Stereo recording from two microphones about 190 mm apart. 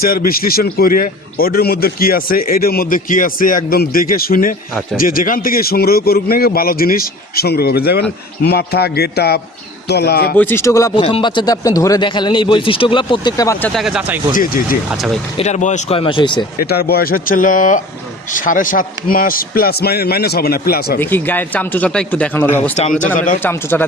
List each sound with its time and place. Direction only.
0.0 s a man's voice: 50° left (ahead or behind)
10.3 s speech: 10° left (ahead or behind)
13.7 s speech: 5° right (ahead or behind)
14.3 s a man's voice: 50° left (ahead or behind)
14.8 s speech: centre (ahead or behind)
15.4 s speech: 35° left (ahead or behind)
16.6 s a man's voice: 55° left (ahead or behind)
21.0 s speech: 10° left (ahead or behind)
22.7 s a man's voice: 35° left (ahead or behind)
23.4 s speech: 10° left (ahead or behind)